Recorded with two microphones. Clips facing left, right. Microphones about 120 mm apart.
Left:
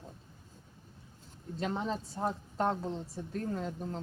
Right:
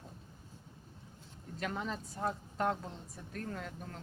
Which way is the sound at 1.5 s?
25° left (ahead or behind).